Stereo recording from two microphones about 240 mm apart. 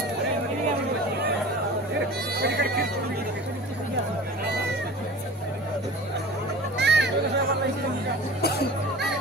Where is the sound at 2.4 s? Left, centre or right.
Right.